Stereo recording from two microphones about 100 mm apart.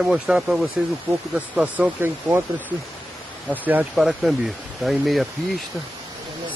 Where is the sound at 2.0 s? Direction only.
25° right (ahead or behind).